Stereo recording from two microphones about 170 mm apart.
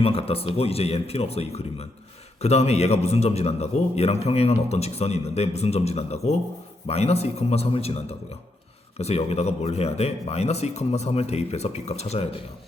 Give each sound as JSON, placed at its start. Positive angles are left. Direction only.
{"t": 0.0, "sound": "a man's voice", "side_deg": 35}